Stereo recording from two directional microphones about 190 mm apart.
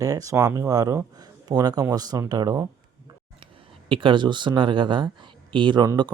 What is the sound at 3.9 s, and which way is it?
Speech, 25° right (ahead or behind).